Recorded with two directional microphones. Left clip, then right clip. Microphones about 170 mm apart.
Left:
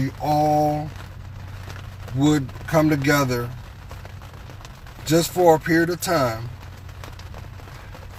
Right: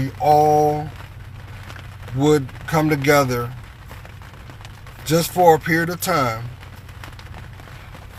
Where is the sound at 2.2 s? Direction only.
25° right (ahead or behind).